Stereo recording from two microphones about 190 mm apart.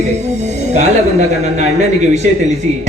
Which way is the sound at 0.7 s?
35° right (ahead or behind).